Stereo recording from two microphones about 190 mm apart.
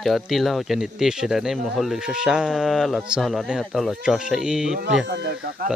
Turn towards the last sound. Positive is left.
turn(degrees=-60)  # may be behind; listen again after turning